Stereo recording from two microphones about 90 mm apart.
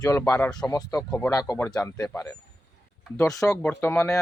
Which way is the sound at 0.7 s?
45° left (ahead or behind).